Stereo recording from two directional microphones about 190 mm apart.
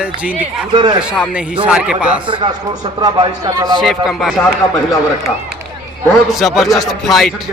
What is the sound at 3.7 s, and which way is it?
Speech, centre (ahead or behind).